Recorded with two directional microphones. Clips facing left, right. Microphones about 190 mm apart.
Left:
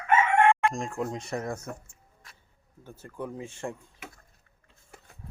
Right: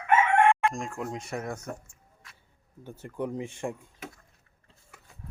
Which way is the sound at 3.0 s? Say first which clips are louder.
Right 4 dB; 15° right (ahead or behind).